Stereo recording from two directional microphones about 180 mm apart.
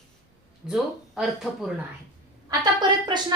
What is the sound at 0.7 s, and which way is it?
A woman's voice, 5° right (ahead or behind).